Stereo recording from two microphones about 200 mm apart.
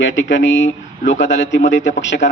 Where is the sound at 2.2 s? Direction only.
35° left (ahead or behind).